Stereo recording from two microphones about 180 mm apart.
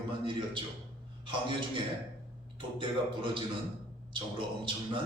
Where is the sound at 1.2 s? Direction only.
25° right (ahead or behind).